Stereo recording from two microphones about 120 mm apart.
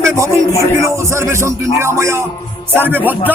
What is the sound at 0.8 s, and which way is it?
Speech, 25° right (ahead or behind).